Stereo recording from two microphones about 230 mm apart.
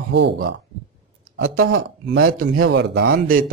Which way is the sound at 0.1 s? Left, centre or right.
Right.